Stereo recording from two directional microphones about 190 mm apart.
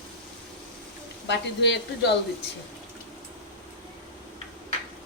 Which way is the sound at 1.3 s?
65° left (ahead or behind).